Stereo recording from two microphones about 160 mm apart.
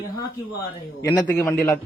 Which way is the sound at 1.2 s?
10° left (ahead or behind).